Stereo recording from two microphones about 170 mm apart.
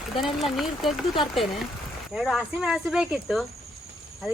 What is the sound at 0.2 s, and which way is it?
Speech, centre (ahead or behind).